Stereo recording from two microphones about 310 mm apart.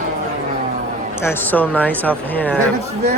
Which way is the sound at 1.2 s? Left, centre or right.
Centre.